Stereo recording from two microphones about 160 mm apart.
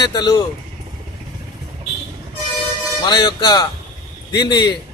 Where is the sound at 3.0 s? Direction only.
25° left (ahead or behind).